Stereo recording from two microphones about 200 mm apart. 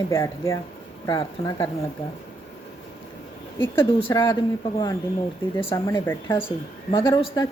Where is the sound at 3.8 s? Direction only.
25° left (ahead or behind).